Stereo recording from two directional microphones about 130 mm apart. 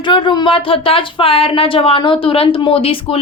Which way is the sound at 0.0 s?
40° left (ahead or behind).